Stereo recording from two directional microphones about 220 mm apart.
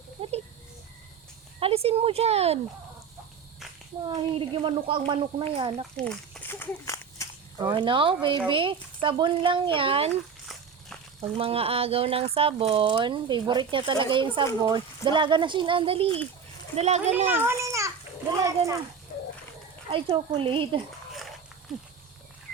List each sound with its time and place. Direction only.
0.2 s a sound: 30° right (ahead or behind)
1.5 s speech: 25° right (ahead or behind)
4.0 s speech: 25° right (ahead or behind)
6.0 s walk: 5° left (ahead or behind)
7.7 s speech: 20° right (ahead or behind)
11.2 s speech: 25° right (ahead or behind)
17.2 s a sound: 10° right (ahead or behind)
18.4 s speech: 15° right (ahead or behind)
19.9 s speech: 25° right (ahead or behind)